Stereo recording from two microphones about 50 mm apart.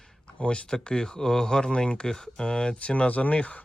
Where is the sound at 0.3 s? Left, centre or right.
Left.